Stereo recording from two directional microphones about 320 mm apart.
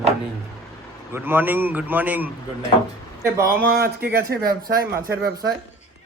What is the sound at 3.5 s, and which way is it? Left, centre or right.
Speech, right.